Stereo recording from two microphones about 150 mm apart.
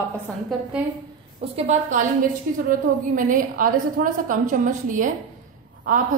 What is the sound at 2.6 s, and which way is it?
Speech, 60° right (ahead or behind).